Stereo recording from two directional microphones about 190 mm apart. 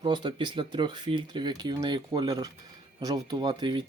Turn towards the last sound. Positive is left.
turn(degrees=-25)  # may be behind; listen again after turning